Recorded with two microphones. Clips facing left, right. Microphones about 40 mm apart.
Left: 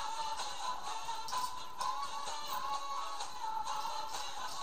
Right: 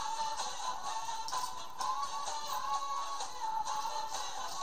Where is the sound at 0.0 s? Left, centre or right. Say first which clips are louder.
Right 2 dB; left.